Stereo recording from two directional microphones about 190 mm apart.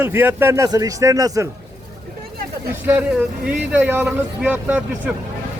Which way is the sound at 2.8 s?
10° right (ahead or behind).